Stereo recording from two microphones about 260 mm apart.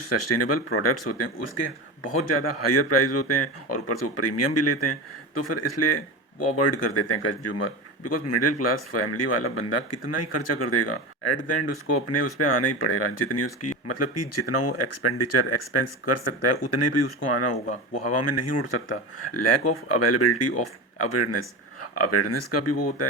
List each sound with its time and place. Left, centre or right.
0.1 s speech: left
2.2 s speech: left